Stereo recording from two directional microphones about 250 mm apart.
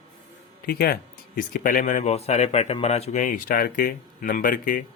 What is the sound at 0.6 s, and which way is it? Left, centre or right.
Speech, left.